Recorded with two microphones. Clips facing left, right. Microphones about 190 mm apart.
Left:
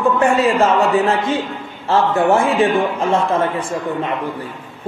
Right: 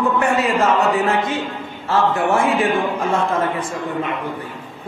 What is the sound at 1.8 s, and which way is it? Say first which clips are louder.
A man's voice: left 3 dB; 25° left (ahead or behind).